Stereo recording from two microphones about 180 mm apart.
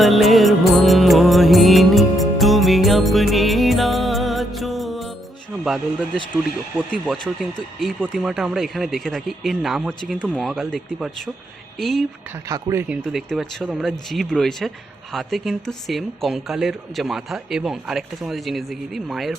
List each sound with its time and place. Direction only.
0.0 s music: centre (ahead or behind)
6.7 s speech: centre (ahead or behind)
12.5 s speech: 20° right (ahead or behind)
12.9 s speech: 5° right (ahead or behind)